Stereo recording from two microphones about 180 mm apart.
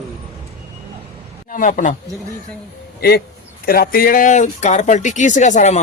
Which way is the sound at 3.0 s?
60° left (ahead or behind).